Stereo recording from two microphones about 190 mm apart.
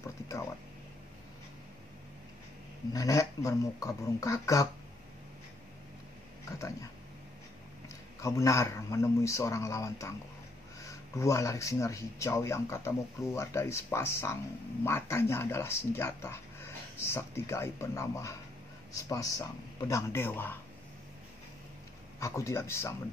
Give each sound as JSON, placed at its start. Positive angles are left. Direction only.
{"t": 0.0, "sound": "a sound", "side_deg": 15}
{"t": 2.9, "sound": "speech", "side_deg": 15}
{"t": 8.2, "sound": "speech", "side_deg": 15}
{"t": 22.2, "sound": "speech", "side_deg": 15}